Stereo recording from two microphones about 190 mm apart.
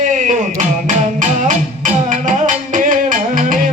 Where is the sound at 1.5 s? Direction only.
40° right (ahead or behind).